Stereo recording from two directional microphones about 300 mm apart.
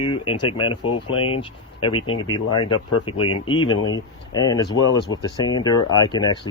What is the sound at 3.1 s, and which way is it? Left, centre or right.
Speech, left.